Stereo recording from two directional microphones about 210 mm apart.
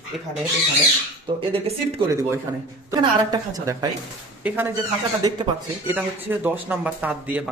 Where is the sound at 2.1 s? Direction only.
15° right (ahead or behind).